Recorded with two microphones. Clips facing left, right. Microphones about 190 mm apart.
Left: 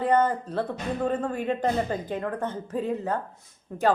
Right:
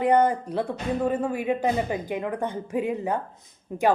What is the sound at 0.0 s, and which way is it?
Speech, 15° right (ahead or behind).